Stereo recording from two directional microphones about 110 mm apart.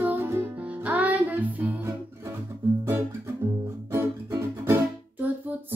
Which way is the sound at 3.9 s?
25° right (ahead or behind).